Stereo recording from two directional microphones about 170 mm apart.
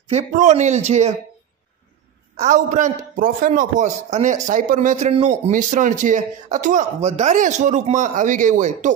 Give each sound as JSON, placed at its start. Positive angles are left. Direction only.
{"t": 0.1, "sound": "speech", "side_deg": -45}
{"t": 2.3, "sound": "speech", "side_deg": -45}